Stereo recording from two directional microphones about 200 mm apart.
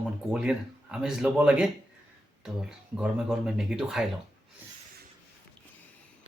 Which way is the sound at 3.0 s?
5° right (ahead or behind).